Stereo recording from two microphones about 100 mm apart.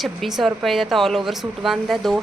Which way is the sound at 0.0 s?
Centre (ahead or behind).